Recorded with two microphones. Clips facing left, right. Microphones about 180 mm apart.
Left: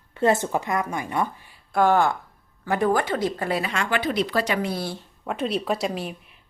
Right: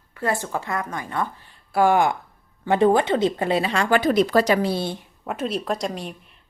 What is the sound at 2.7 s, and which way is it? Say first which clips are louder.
Speech: right 4 dB; 25° right (ahead or behind).